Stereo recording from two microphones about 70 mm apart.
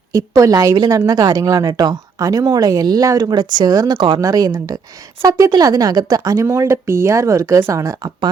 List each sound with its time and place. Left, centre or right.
0.1 s speech: right
3.2 s speech: right
6.4 s speech: right